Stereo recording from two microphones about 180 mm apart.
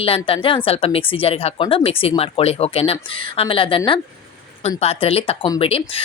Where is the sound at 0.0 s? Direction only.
30° left (ahead or behind).